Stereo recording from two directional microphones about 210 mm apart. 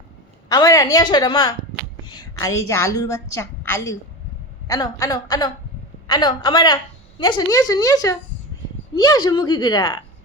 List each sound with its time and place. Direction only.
0.4 s a woman's voice: 15° left (ahead or behind)